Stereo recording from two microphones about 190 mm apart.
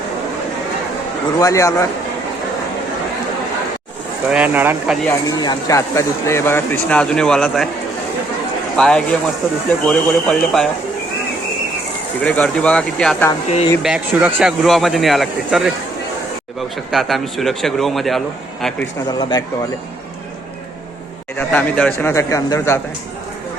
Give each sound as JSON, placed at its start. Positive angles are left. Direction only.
{"t": 1.4, "sound": "speech", "side_deg": 15}
{"t": 4.3, "sound": "speech", "side_deg": -10}
{"t": 5.0, "sound": "speech", "side_deg": 20}
{"t": 8.7, "sound": "speech", "side_deg": 5}
{"t": 12.2, "sound": "speech", "side_deg": 5}
{"t": 13.8, "sound": "speech", "side_deg": -5}
{"t": 21.3, "sound": "speech", "side_deg": 10}